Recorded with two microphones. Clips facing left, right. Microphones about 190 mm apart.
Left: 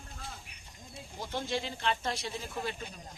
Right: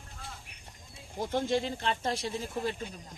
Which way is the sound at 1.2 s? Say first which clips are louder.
Right 6 dB; 45° right (ahead or behind).